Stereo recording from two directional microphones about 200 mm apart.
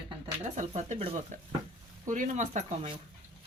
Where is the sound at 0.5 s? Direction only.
35° right (ahead or behind).